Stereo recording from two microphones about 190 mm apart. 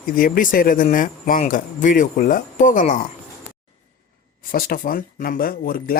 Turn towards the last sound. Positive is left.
turn(degrees=50)  # may be behind; listen again after turning